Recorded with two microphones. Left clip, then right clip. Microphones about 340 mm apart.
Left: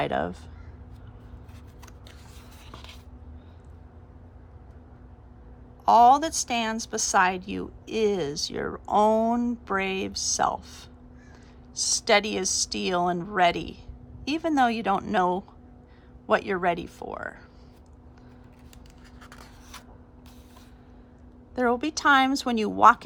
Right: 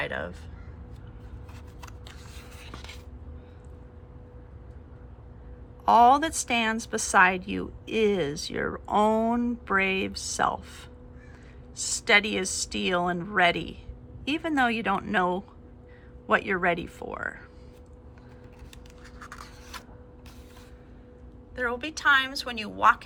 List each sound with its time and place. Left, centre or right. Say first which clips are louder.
0.0 s a woman's voice: left 5 dB; centre
2.7 s a sound: right 1 dB; centre
5.8 s a woman's voice: left 1 dB; centre
19.2 s a sound: right 5 dB; left
19.7 s printer: right 4 dB; centre
21.5 s a woman's voice: left 5 dB; centre